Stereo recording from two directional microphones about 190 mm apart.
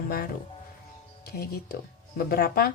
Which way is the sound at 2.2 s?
55° left (ahead or behind).